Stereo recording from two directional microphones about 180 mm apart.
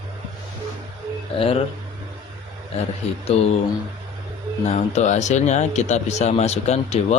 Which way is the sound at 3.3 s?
35° left (ahead or behind).